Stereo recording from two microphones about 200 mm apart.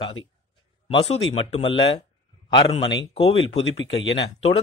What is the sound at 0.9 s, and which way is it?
Speech, 30° left (ahead or behind).